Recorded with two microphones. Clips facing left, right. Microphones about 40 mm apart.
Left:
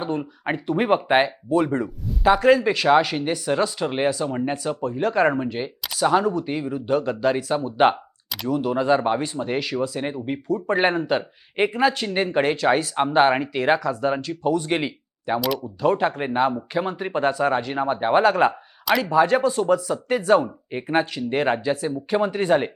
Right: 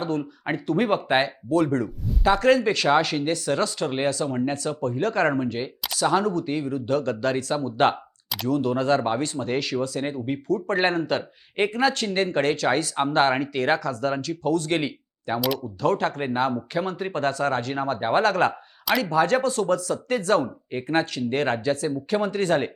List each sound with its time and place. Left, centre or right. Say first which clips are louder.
0.0 s speech: left 1 dB; centre